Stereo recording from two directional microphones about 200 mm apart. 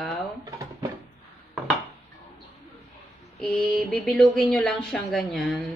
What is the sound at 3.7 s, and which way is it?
Speech, 5° left (ahead or behind).